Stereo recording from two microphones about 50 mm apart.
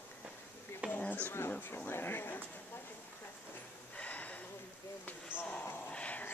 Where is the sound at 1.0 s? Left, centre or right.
Left.